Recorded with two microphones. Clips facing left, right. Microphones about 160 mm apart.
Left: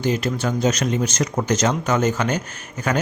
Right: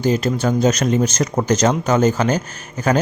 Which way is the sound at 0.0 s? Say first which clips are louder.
Right 4 dB; 40° right (ahead or behind).